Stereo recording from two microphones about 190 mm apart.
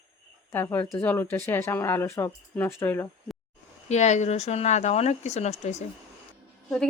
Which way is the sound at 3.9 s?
35° left (ahead or behind).